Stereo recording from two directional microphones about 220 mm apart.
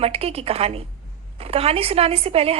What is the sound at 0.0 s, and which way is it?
A woman's voice, 25° right (ahead or behind).